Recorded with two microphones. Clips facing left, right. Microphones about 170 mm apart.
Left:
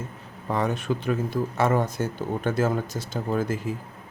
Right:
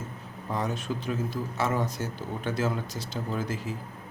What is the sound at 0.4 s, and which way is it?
Speech, 65° left (ahead or behind).